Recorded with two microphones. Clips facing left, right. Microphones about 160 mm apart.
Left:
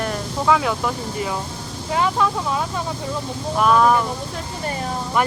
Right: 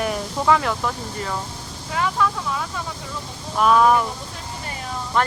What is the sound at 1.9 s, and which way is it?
Speech, 25° left (ahead or behind).